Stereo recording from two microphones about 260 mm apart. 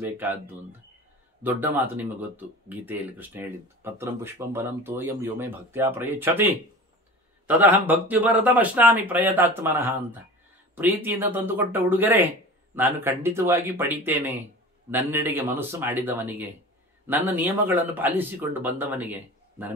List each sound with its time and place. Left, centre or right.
0.0 s speech: centre
1.4 s speech: centre